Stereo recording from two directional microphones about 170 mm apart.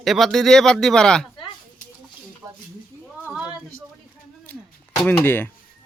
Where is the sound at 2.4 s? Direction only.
20° right (ahead or behind).